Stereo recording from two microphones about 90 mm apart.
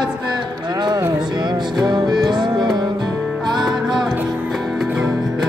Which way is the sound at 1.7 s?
50° right (ahead or behind).